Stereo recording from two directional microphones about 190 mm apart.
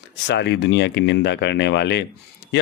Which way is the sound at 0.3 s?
65° left (ahead or behind).